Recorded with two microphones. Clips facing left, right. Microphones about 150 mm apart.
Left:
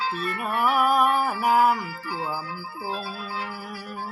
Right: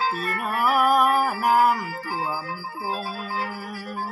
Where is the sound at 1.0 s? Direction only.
40° right (ahead or behind).